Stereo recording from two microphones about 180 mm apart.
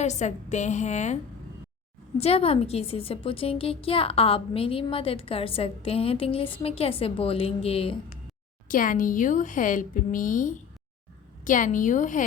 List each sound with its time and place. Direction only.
0.0 s a woman's voice: 40° left (ahead or behind)
8.6 s a woman's voice: 50° left (ahead or behind)